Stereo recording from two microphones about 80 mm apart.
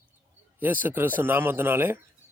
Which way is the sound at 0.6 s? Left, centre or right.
Right.